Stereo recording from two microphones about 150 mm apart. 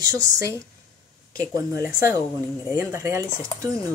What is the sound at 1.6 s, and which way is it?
Speech, 20° right (ahead or behind).